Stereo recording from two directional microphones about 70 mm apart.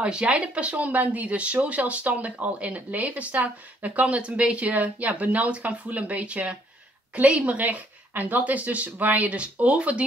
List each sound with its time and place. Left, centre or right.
0.0 s speech: centre